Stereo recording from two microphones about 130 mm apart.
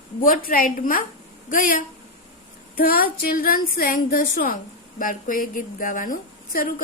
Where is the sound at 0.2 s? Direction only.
90° left.